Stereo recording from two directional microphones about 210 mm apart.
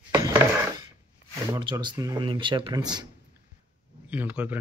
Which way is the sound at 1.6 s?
20° right (ahead or behind).